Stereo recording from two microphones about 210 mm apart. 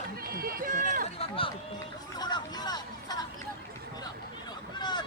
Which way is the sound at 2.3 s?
20° left (ahead or behind).